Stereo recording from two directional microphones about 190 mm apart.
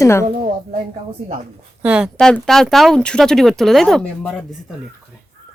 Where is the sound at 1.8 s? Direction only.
5° right (ahead or behind).